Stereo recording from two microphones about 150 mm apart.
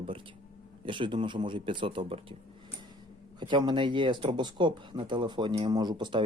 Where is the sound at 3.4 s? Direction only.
30° right (ahead or behind).